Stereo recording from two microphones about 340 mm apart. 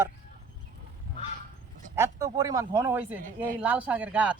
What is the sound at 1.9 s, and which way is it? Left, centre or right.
Speech, centre.